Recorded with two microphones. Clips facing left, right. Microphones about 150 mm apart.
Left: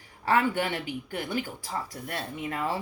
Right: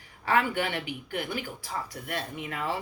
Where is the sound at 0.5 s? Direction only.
40° left (ahead or behind).